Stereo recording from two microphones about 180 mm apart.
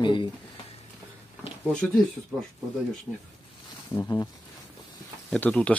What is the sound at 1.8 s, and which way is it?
Speech, 10° left (ahead or behind).